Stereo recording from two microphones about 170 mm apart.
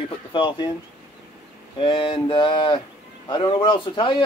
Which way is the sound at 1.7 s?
30° left (ahead or behind).